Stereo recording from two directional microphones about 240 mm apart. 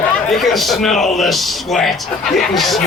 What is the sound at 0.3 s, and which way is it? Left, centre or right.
A man's voice, centre.